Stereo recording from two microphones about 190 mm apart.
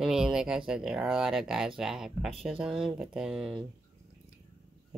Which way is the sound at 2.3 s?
30° right (ahead or behind).